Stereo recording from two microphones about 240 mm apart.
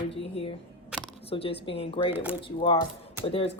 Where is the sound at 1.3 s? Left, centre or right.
Left.